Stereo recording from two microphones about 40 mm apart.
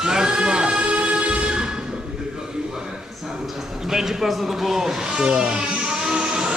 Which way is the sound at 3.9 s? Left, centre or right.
Centre.